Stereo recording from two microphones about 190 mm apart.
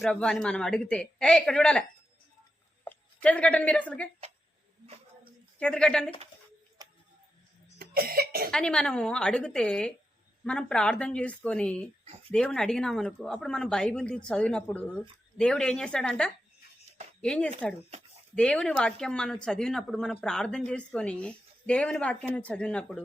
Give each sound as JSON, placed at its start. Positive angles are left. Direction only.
{"t": 0.0, "sound": "speech", "side_deg": 5}
{"t": 2.8, "sound": "a woman's voice", "side_deg": 10}
{"t": 5.5, "sound": "speech", "side_deg": 5}
{"t": 6.8, "sound": "tick-tock", "side_deg": -20}
{"t": 7.8, "sound": "cough", "side_deg": -50}
{"t": 8.4, "sound": "speech", "side_deg": 5}